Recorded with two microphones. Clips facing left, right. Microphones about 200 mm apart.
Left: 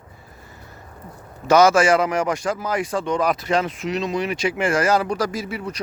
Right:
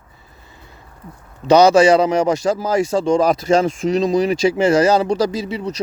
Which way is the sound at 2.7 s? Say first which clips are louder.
Right 8 dB; 25° right (ahead or behind).